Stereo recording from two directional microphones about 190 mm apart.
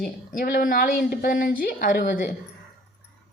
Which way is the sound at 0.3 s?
50° left (ahead or behind).